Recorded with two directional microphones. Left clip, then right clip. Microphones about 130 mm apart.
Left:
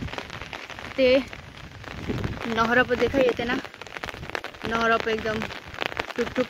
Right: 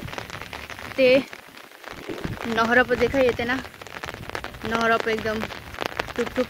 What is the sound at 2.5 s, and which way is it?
Speech, 20° right (ahead or behind).